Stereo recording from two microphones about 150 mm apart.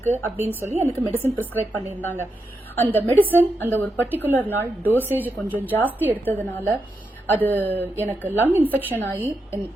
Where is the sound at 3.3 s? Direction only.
15° right (ahead or behind).